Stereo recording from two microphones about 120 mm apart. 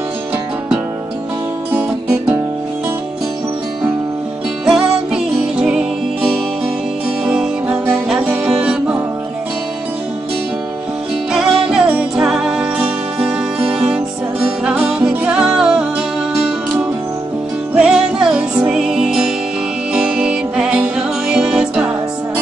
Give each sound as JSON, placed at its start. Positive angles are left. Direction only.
{"t": 1.7, "sound": "music", "side_deg": -15}
{"t": 4.6, "sound": "music", "side_deg": -5}
{"t": 7.2, "sound": "music", "side_deg": -10}
{"t": 11.3, "sound": "music", "side_deg": -5}
{"t": 17.7, "sound": "music", "side_deg": -5}